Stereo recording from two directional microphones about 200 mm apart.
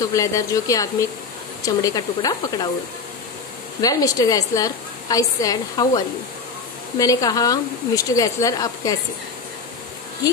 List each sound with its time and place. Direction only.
0.0 s a woman's voice: 15° left (ahead or behind)
3.8 s a woman's voice: 15° left (ahead or behind)